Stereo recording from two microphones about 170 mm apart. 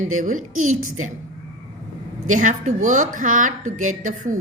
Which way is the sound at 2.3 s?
50° right (ahead or behind).